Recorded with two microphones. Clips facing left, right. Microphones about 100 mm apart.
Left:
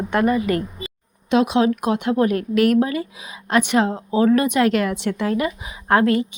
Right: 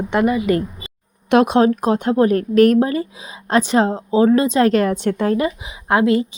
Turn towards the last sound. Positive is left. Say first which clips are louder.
# even
turn(degrees=-15)  # may be behind; listen again after turning